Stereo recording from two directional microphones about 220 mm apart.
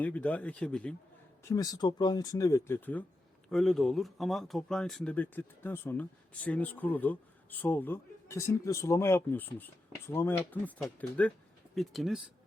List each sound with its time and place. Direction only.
0.0 s speech: 5° left (ahead or behind)
1.5 s speech: 15° left (ahead or behind); by 12.2 s centre (ahead or behind)